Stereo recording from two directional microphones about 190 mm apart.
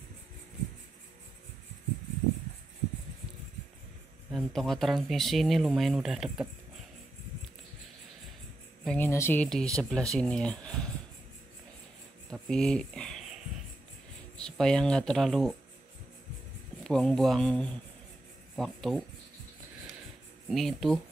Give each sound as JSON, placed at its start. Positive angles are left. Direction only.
{"t": 4.3, "sound": "speech", "side_deg": 0}
{"t": 8.8, "sound": "speech", "side_deg": 10}
{"t": 12.3, "sound": "speech", "side_deg": 5}
{"t": 14.3, "sound": "speech", "side_deg": 5}
{"t": 16.8, "sound": "speech", "side_deg": 5}
{"t": 20.4, "sound": "speech", "side_deg": 0}